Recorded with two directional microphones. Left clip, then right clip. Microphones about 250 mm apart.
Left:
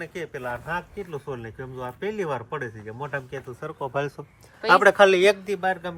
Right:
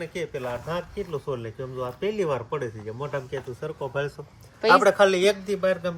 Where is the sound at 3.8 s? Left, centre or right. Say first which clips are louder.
Left 3 dB; left.